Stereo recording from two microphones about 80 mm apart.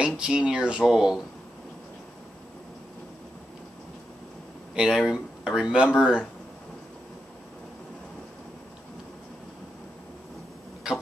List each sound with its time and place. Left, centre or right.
0.0 s speech: centre
4.7 s speech: centre